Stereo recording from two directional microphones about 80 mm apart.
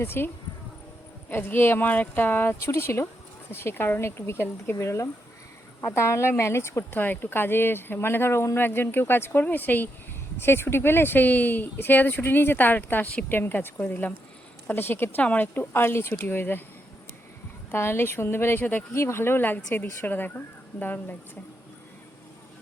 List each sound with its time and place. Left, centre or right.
0.0 s speech: left
1.3 s speech: left
17.7 s speech: left
18.9 s speech: left